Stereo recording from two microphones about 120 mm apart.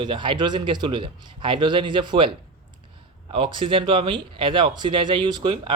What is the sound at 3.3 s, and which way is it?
Speech, 45° right (ahead or behind).